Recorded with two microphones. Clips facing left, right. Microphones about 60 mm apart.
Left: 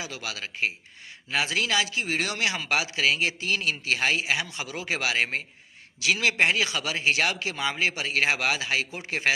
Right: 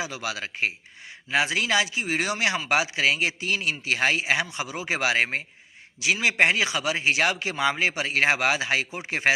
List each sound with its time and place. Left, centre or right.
0.0 s speech: right